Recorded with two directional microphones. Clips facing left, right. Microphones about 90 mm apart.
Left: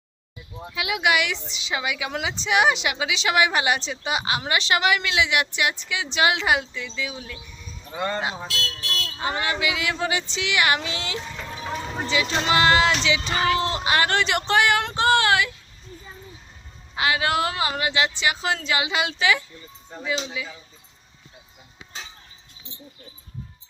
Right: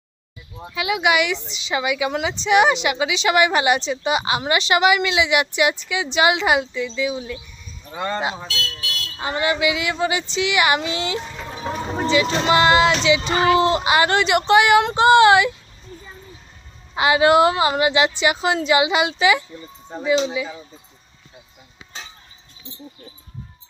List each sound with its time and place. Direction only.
0.7 s speech: centre (ahead or behind)
12.5 s speech: centre (ahead or behind); by 15.5 s 20° right (ahead or behind)
16.9 s a woman's voice: 20° right (ahead or behind)